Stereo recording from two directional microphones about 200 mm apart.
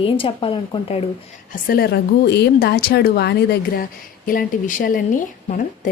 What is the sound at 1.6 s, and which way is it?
Speech, 50° left (ahead or behind).